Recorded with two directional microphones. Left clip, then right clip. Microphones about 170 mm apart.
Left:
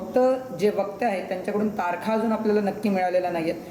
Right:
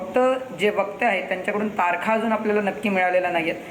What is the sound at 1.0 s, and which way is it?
Speech, 25° left (ahead or behind).